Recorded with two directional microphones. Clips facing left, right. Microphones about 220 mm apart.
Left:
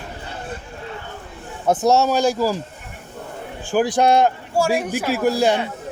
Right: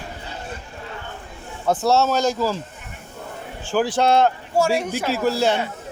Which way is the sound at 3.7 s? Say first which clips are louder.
Left 2 dB; 15° left (ahead or behind).